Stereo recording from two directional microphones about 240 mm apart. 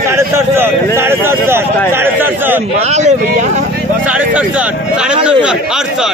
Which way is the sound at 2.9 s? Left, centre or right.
Right.